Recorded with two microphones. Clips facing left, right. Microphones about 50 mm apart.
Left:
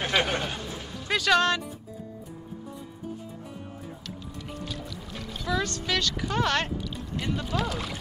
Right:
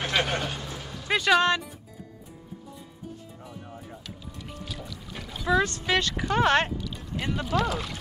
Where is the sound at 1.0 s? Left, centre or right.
Centre.